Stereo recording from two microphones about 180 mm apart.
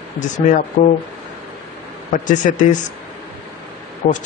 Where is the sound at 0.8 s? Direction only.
40° left (ahead or behind).